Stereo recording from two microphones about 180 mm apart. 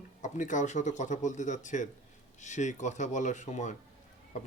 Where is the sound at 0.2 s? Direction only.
45° left (ahead or behind).